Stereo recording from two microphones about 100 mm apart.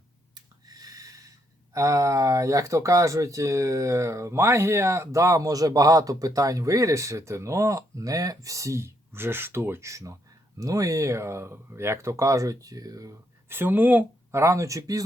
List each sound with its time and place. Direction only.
0.3 s snort: 40° right (ahead or behind)
1.7 s speech: 30° right (ahead or behind)
13.5 s speech: 20° right (ahead or behind); by 15.0 s 35° right (ahead or behind)